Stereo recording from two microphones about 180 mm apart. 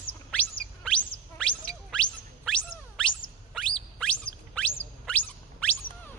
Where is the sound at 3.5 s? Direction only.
5° left (ahead or behind).